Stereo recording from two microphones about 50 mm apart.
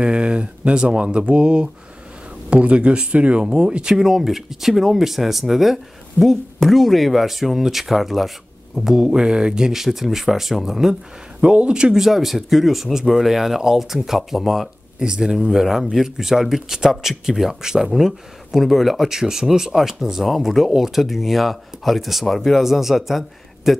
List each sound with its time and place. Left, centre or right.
0.0 s speech: right; by 14.7 s centre
15.0 s speech: centre